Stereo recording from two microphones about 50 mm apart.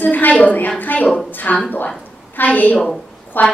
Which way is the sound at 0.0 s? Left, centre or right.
Left.